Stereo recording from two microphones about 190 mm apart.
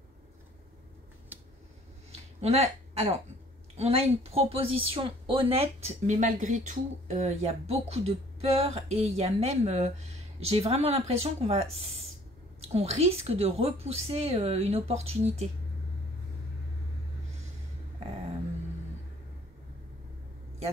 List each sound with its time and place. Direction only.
2.4 s speech: 35° right (ahead or behind)